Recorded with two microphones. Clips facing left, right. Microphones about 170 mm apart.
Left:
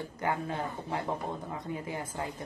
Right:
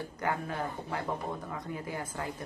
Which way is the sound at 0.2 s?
20° left (ahead or behind).